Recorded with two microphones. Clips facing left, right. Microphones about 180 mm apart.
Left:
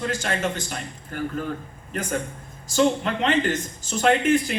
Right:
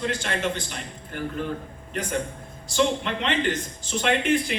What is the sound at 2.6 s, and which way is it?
A man's voice, 45° left (ahead or behind).